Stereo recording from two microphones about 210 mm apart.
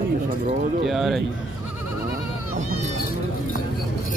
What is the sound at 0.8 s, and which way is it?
Speech, centre (ahead or behind).